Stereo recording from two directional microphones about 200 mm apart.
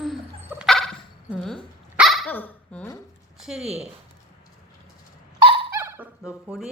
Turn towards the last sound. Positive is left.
turn(degrees=-5)  # may be behind; listen again after turning